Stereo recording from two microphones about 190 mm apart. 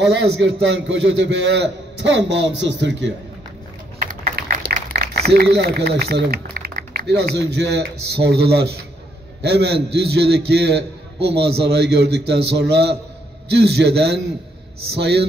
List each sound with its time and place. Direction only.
0.0 s a man's voice: 65° right (ahead or behind)
4.0 s a man's voice: 50° right (ahead or behind)